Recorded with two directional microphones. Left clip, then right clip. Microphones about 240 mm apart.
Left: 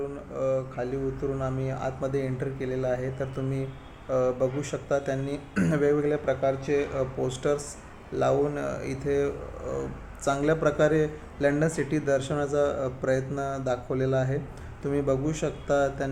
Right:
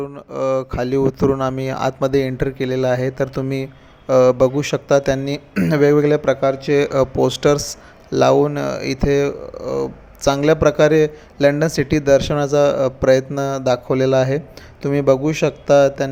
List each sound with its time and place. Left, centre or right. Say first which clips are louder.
0.3 s a man's voice: right 9 dB; right
9.6 s speech: right 14 dB; centre
10.2 s a man's voice: right 10 dB; right